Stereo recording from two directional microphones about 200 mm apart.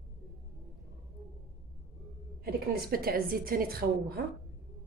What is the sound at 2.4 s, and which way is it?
Speech, 50° right (ahead or behind).